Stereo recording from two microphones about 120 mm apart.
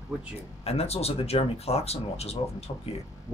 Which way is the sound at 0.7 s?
60° left (ahead or behind).